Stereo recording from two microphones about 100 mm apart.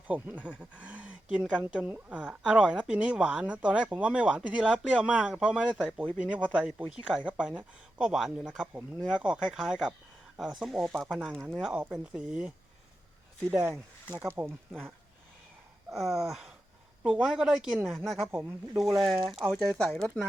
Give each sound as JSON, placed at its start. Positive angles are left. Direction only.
{"t": 0.1, "sound": "a woman's voice", "side_deg": -15}
{"t": 13.5, "sound": "speech", "side_deg": -20}
{"t": 15.9, "sound": "a woman's voice", "side_deg": 0}
{"t": 18.3, "sound": "speech", "side_deg": -25}
{"t": 18.8, "sound": "speech", "side_deg": 0}